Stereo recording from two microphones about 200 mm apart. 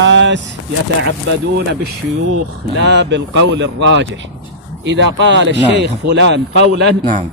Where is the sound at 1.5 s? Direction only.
55° right (ahead or behind).